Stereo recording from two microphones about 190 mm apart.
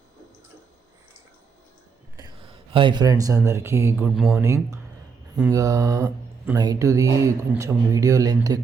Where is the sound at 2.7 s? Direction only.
25° right (ahead or behind); by 4.4 s centre (ahead or behind).